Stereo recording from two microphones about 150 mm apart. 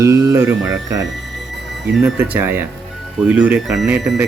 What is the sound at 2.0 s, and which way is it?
Speech, 10° right (ahead or behind).